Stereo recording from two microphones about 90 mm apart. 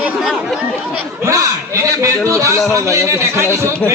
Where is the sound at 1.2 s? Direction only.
35° right (ahead or behind).